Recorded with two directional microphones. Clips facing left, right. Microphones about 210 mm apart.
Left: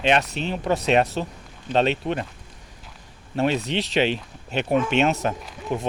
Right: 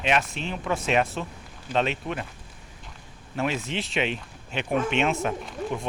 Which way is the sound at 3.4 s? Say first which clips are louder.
Left 5 dB; 35° left (ahead or behind).